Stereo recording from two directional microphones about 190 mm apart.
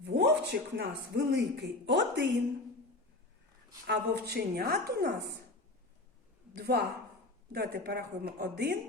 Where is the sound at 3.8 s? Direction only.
60° right (ahead or behind).